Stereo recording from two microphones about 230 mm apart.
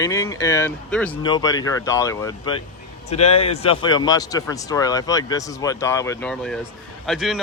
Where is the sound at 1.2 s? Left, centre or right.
Centre.